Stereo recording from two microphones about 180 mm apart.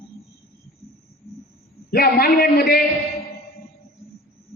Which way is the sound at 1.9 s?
60° left (ahead or behind).